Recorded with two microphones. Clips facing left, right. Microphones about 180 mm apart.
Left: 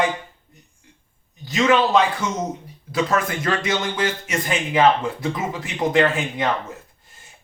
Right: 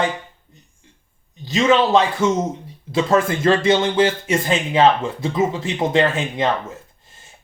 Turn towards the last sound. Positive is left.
turn(degrees=-25)  # may be behind; listen again after turning